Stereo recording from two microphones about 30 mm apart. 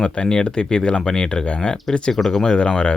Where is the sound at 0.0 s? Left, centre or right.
Left.